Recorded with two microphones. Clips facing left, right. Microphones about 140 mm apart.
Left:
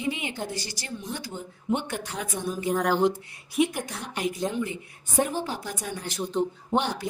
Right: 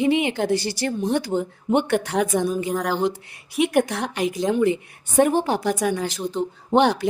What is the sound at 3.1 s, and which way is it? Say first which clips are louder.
Speech: even; 75° right (ahead or behind).